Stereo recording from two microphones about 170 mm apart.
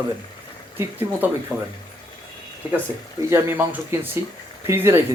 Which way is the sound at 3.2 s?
15° right (ahead or behind).